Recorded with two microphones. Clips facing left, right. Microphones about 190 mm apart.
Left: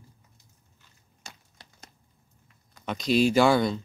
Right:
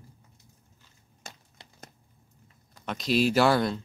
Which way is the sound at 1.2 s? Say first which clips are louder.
Right 2 dB; 55° right (ahead or behind).